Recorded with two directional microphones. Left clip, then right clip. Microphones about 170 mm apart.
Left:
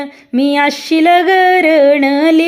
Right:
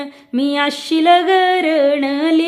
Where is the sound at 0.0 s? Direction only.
15° left (ahead or behind).